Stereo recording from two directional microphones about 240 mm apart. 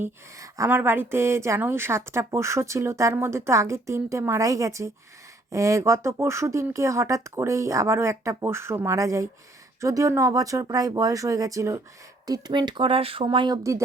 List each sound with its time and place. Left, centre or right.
0.0 s speech: centre